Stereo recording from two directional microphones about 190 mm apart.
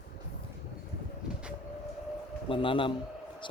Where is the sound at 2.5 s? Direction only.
25° left (ahead or behind).